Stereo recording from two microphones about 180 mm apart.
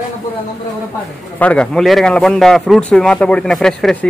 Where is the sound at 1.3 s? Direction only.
5° left (ahead or behind).